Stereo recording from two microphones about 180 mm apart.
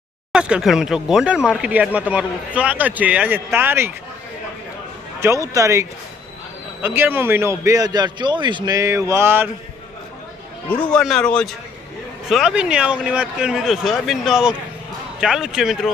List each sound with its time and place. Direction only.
0.3 s speech: 5° right (ahead or behind)
5.2 s speech: 15° right (ahead or behind)
6.8 s speech: 10° right (ahead or behind)
10.7 s speech: 5° left (ahead or behind)